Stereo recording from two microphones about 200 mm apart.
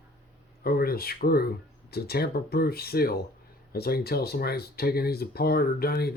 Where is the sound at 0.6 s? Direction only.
50° left (ahead or behind).